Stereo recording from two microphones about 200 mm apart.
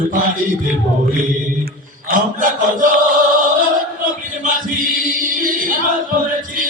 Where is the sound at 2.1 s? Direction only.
45° right (ahead or behind).